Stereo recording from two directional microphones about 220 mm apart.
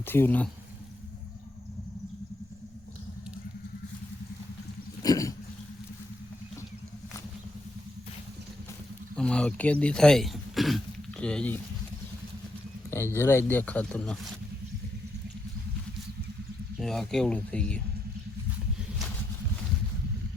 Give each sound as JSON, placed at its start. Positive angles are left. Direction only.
{"t": 0.0, "sound": "speech", "side_deg": 10}
{"t": 5.0, "sound": "dog", "side_deg": 15}
{"t": 9.1, "sound": "speech", "side_deg": 5}
{"t": 12.9, "sound": "speech", "side_deg": 10}
{"t": 16.8, "sound": "speech", "side_deg": 0}